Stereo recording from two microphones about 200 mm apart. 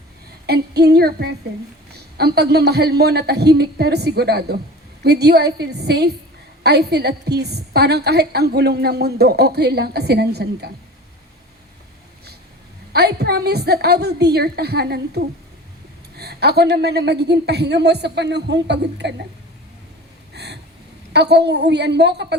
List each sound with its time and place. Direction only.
0.4 s a woman's voice: 50° right (ahead or behind)
12.9 s a woman's voice: 55° right (ahead or behind)
20.3 s a sound: 55° right (ahead or behind)
21.1 s a woman's voice: 55° right (ahead or behind)